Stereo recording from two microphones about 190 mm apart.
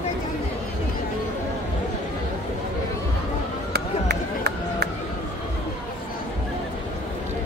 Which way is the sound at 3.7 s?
60° right (ahead or behind).